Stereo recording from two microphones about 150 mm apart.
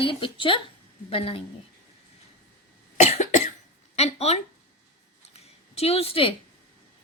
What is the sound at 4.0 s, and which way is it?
Speech, 45° left (ahead or behind).